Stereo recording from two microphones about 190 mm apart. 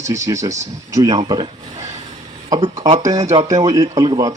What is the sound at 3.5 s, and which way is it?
Speech, 20° right (ahead or behind).